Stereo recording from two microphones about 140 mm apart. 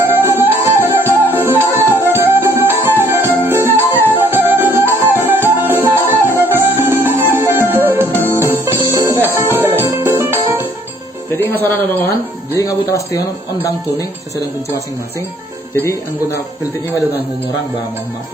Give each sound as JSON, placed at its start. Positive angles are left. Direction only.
{"t": 0.6, "sound": "music", "side_deg": -15}
{"t": 11.3, "sound": "a sound", "side_deg": 15}
{"t": 12.5, "sound": "speech", "side_deg": 25}
{"t": 15.8, "sound": "speech", "side_deg": 20}